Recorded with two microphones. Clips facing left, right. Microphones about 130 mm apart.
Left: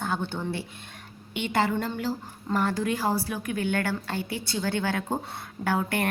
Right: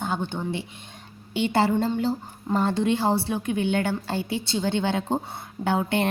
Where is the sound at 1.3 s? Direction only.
30° right (ahead or behind).